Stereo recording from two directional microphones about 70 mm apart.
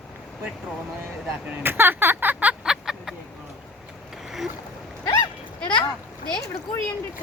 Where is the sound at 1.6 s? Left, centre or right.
Right.